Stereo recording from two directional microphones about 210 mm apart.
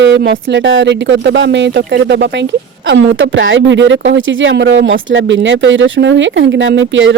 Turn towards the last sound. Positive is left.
turn(degrees=-65)  # may be behind; listen again after turning